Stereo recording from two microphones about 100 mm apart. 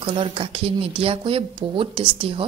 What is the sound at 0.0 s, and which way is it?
A woman's voice, 60° right (ahead or behind).